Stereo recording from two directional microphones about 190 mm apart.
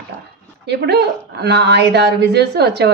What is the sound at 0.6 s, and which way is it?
A woman's voice, 60° right (ahead or behind).